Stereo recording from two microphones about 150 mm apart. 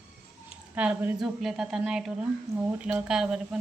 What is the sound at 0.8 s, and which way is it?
A woman's voice, 5° right (ahead or behind).